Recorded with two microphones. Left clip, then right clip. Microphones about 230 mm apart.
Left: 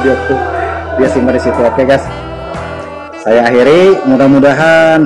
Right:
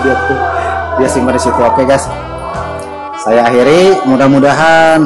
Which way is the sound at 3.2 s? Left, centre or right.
Centre.